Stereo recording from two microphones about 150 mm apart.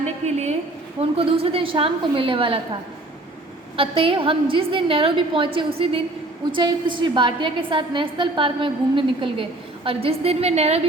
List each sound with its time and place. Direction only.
0.0 s a woman's voice: 45° right (ahead or behind)
3.8 s a woman's voice: 40° right (ahead or behind)